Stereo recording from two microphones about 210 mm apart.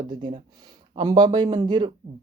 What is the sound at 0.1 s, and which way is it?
Speech, 20° right (ahead or behind).